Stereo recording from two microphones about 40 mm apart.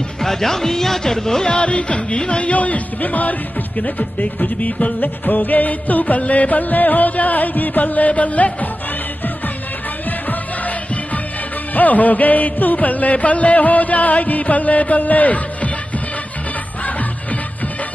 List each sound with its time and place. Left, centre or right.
0.2 s speech: centre
1.6 s speech: left
10.0 s music: left
11.7 s speech: left